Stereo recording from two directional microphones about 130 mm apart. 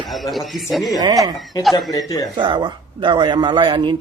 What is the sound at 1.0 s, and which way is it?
Speech, 30° right (ahead or behind).